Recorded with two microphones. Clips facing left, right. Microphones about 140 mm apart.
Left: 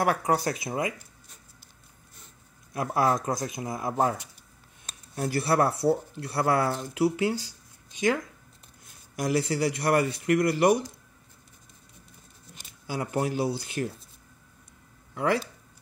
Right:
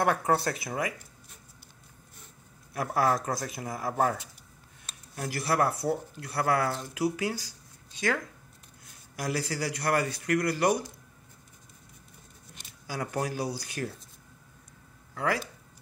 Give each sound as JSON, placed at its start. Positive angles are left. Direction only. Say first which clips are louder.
{"t": 0.0, "sound": "speech", "louder": "left 1 dB", "side_deg": 10}
{"t": 2.7, "sound": "speech", "louder": "left 2 dB", "side_deg": 20}
{"t": 12.8, "sound": "speech", "louder": "left 3 dB", "side_deg": 20}
{"t": 15.1, "sound": "speech", "louder": "left 4 dB", "side_deg": 25}